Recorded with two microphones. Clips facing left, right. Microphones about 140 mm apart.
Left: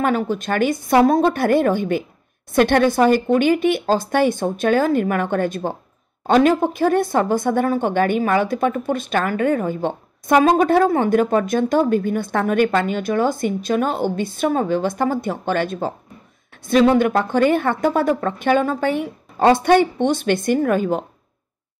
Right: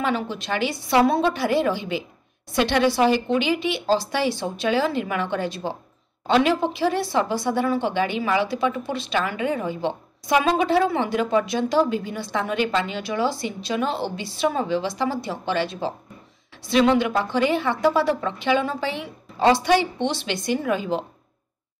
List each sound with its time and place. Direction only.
0.0 s a woman's voice: 45° left (ahead or behind)